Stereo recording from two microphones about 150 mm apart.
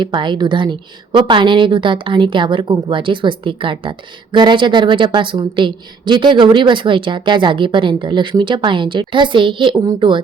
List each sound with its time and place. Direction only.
0.0 s a woman's voice: 30° right (ahead or behind)